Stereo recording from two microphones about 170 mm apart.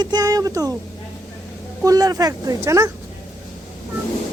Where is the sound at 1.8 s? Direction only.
20° right (ahead or behind).